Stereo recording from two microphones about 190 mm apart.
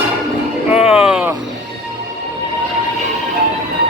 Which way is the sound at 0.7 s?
35° left (ahead or behind).